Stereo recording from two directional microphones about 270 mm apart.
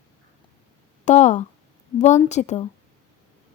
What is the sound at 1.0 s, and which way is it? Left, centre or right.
Speech, left.